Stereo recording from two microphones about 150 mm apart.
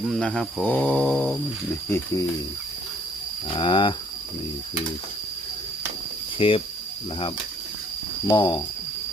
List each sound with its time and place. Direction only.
0.1 s speech: 5° left (ahead or behind)
3.5 s speech: 35° left (ahead or behind)
6.4 s speech: 40° left (ahead or behind)
8.3 s speech: 30° left (ahead or behind)